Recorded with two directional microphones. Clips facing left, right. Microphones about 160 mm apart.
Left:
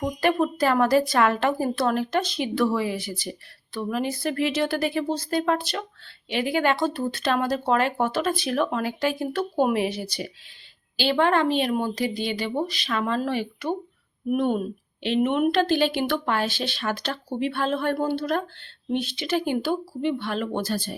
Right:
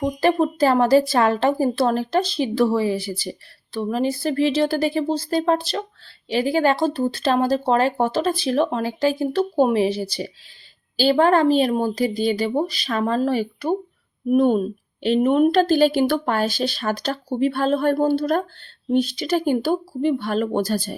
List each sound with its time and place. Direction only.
0.0 s a woman's voice: 30° right (ahead or behind)